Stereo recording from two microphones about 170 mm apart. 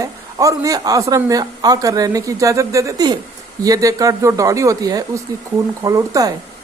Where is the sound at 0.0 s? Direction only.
20° right (ahead or behind).